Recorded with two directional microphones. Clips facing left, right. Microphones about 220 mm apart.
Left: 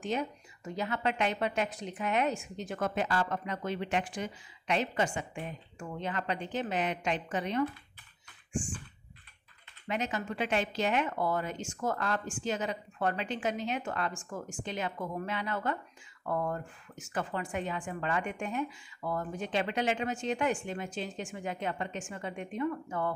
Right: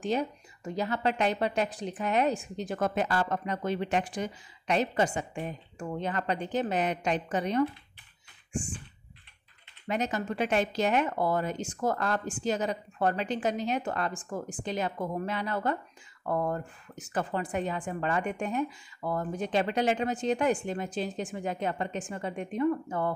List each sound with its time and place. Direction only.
0.0 s a woman's voice: 35° right (ahead or behind)
9.8 s a woman's voice: 40° right (ahead or behind)